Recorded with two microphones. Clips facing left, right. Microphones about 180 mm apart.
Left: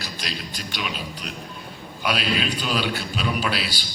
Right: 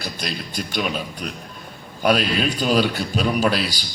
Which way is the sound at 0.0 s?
50° right (ahead or behind).